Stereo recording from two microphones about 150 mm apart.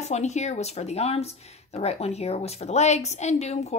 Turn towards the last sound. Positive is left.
turn(degrees=45)  # may be behind; listen again after turning